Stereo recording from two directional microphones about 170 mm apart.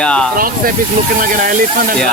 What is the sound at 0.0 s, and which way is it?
Speech, 5° left (ahead or behind).